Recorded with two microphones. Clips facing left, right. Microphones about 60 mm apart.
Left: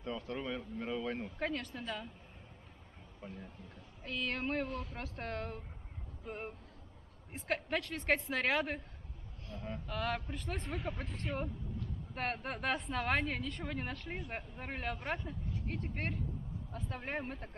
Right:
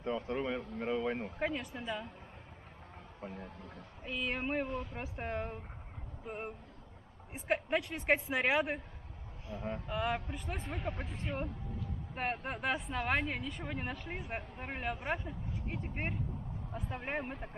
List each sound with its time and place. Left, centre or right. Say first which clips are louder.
0.0 s speech: right 5 dB; right
3.2 s speech: right 3 dB; right
3.4 s speech: right 4 dB; right
4.0 s speech: right 1 dB; centre